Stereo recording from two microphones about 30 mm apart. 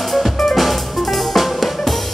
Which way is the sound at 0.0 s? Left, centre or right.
Centre.